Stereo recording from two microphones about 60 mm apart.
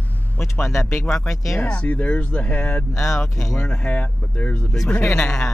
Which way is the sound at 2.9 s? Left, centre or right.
Left.